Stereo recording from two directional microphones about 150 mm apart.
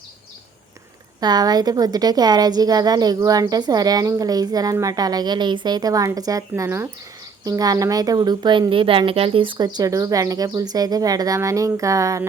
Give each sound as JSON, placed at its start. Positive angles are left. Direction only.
{"t": 1.2, "sound": "a woman's voice", "side_deg": -25}